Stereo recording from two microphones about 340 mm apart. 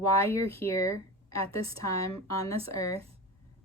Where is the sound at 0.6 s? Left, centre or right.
Centre.